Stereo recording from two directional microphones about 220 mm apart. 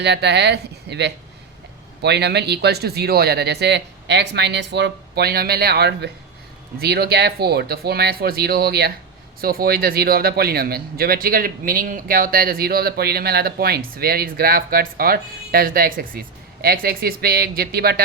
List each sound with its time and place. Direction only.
0.0 s a man's voice: 50° right (ahead or behind)